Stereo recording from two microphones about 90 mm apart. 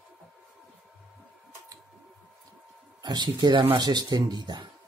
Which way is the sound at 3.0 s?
50° right (ahead or behind).